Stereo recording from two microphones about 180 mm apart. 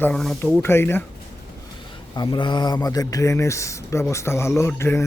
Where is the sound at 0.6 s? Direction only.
15° left (ahead or behind).